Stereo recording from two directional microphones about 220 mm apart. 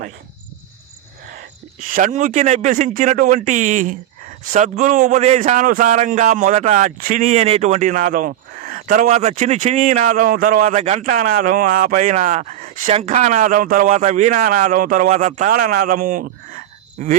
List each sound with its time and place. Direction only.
1.8 s a man's voice: 35° right (ahead or behind)